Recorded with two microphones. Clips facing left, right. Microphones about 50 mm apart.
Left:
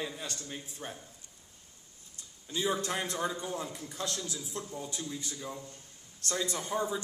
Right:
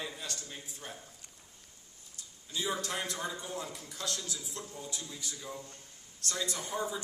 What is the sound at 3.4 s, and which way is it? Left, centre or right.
A man's voice, left.